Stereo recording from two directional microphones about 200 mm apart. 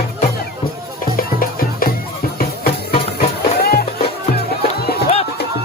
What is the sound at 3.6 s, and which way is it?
Music, 50° left (ahead or behind).